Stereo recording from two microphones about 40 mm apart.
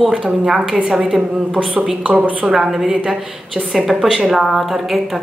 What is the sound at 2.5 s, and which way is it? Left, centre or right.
Speech, centre.